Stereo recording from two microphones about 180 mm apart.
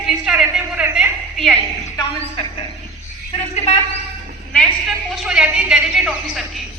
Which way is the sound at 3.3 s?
35° left (ahead or behind).